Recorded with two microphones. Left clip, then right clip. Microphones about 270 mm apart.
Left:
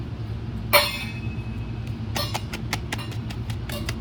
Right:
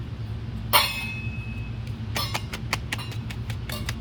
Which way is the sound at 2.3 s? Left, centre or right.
Centre.